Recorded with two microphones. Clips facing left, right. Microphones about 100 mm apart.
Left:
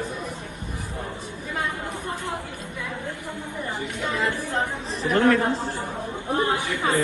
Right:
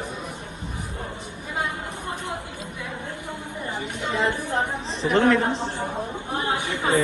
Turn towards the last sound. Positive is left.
turn(degrees=-20)  # may be behind; listen again after turning